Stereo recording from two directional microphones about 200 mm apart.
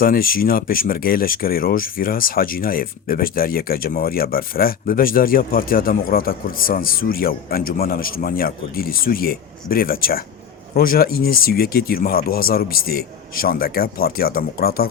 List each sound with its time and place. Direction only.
0.0 s speech: 45° left (ahead or behind)